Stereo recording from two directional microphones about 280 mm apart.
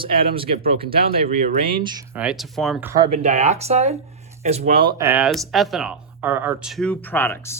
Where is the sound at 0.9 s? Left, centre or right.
Right.